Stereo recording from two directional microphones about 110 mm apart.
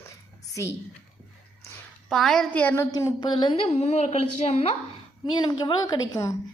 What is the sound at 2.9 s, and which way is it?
Speech, 35° left (ahead or behind).